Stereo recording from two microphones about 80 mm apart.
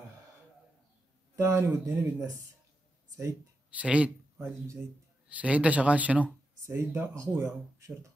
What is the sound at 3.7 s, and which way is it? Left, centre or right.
Speech, centre.